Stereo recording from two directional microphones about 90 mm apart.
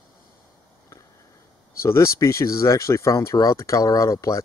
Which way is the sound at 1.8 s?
30° left (ahead or behind).